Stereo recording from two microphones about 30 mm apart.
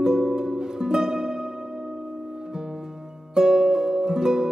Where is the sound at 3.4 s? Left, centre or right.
Right.